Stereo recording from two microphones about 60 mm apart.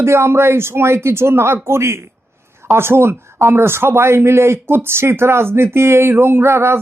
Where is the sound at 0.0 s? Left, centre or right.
Right.